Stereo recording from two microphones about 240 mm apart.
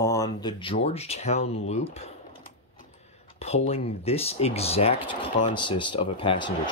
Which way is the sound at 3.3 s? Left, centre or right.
Left.